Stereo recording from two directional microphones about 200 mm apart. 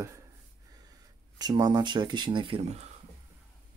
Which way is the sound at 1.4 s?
20° right (ahead or behind).